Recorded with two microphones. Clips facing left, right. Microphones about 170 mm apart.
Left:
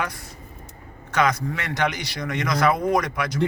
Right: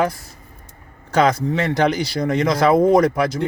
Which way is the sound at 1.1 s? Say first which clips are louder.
Right 6 dB; 30° right (ahead or behind).